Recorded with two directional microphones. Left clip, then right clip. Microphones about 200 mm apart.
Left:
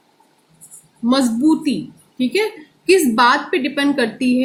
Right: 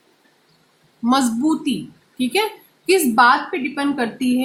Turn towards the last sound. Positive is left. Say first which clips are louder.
# left 4 dB
turn(degrees=-30)  # may be behind; listen again after turning